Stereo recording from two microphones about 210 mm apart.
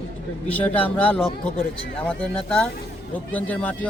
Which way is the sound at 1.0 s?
5° left (ahead or behind).